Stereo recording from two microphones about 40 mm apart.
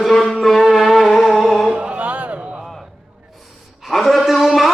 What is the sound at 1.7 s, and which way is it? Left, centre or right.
Music, right.